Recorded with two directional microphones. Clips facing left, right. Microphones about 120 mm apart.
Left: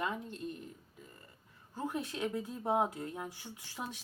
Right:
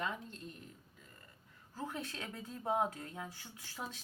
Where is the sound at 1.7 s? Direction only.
15° left (ahead or behind).